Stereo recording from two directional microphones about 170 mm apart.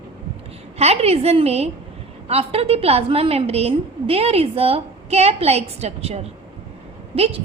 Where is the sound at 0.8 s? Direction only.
35° right (ahead or behind).